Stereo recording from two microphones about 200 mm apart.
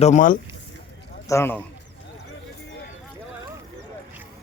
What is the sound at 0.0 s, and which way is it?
Speech, 40° left (ahead or behind).